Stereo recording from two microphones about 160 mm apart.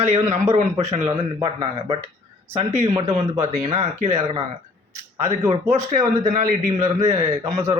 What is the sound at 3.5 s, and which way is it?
Speech, 45° right (ahead or behind).